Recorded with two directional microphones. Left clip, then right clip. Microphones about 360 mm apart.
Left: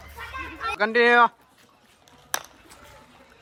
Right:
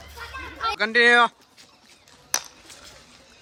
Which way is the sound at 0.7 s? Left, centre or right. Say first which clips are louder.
Right 1 dB; centre.